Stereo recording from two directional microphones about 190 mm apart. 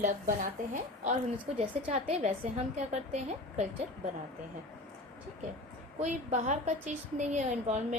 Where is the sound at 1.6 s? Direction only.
35° right (ahead or behind).